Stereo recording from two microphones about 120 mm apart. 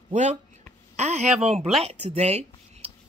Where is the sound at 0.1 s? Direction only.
75° right (ahead or behind).